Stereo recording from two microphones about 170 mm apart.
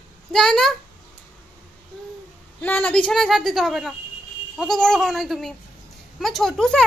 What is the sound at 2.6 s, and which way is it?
A woman's voice, 5° left (ahead or behind).